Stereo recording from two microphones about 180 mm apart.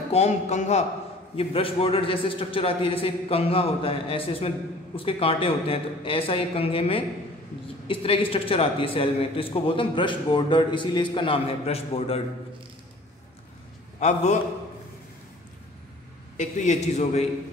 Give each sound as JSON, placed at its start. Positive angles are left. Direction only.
{"t": 0.1, "sound": "a man's voice", "side_deg": 40}
{"t": 13.9, "sound": "a man's voice", "side_deg": 40}
{"t": 16.3, "sound": "a man's voice", "side_deg": 40}